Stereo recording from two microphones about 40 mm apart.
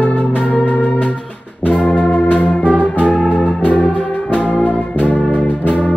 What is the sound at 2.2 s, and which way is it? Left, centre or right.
Music, left.